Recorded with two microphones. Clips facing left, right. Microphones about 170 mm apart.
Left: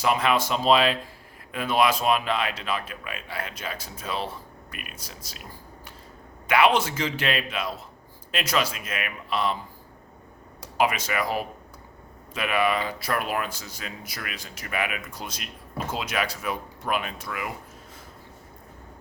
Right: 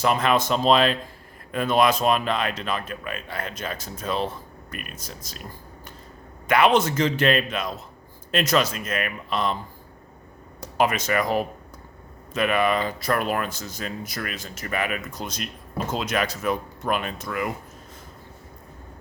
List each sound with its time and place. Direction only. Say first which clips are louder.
0.0 s speech: right 2 dB; 5° left (ahead or behind)
4.7 s speech: right 5 dB; 45° right (ahead or behind)
6.5 s speech: right 2 dB; 10° left (ahead or behind)
10.6 s speech: right 2 dB; 10° left (ahead or behind)